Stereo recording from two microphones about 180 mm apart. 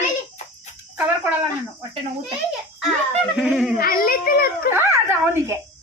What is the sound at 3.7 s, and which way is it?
Speech, 55° left (ahead or behind).